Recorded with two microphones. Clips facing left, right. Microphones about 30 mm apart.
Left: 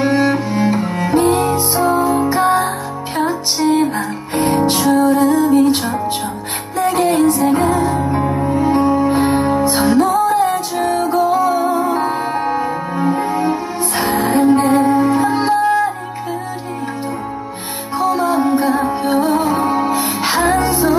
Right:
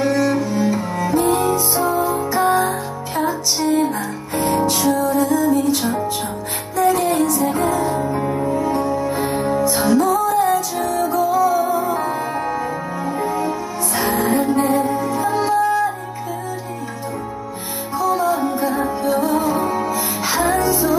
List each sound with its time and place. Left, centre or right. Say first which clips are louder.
0.0 s music: left 3 dB; left
7.2 s music: left 5 dB; left
7.5 s music: left 4 dB; left
8.5 s music: left 6 dB; left
11.6 s music: left 3 dB; left
17.9 s music: left 3 dB; left